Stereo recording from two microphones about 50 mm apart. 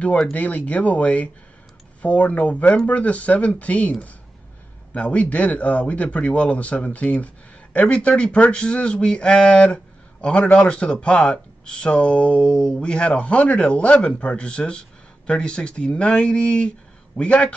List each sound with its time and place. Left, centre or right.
0.3 s a man's voice: left
4.9 s a man's voice: left